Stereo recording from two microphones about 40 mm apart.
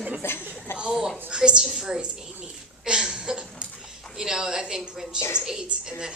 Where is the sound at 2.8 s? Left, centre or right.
Centre.